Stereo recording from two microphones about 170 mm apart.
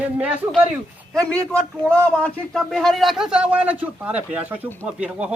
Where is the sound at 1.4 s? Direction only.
15° right (ahead or behind).